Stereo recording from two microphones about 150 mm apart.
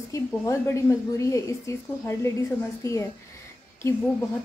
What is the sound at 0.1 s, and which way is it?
A woman's voice, 20° left (ahead or behind).